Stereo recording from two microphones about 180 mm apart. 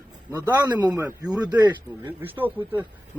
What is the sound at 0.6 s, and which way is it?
A man's voice, 20° right (ahead or behind).